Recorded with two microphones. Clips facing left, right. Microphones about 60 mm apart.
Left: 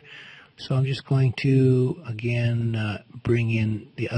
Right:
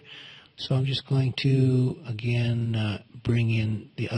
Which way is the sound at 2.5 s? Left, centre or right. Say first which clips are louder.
Left 2 dB; centre.